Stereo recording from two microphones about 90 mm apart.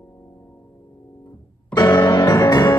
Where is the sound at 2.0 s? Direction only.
50° left (ahead or behind).